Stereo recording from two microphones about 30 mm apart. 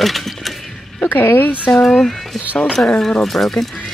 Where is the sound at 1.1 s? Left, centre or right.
Left.